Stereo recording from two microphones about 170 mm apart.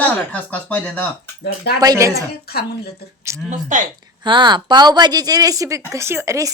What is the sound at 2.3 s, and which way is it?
Speech, 70° left (ahead or behind).